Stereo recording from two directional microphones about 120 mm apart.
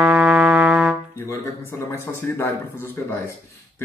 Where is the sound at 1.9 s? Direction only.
20° left (ahead or behind).